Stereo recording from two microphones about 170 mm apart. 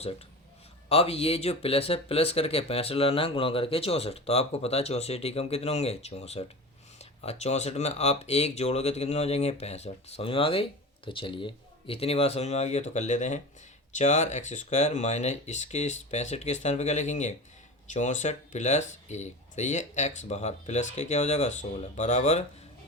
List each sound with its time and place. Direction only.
0.9 s speech: 35° left (ahead or behind)